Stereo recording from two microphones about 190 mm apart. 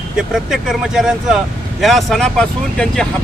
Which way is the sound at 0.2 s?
Centre (ahead or behind).